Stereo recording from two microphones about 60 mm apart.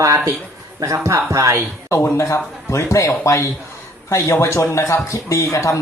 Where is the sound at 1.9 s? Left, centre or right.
Left.